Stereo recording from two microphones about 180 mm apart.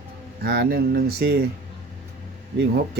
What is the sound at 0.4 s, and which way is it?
Speech, 65° right (ahead or behind).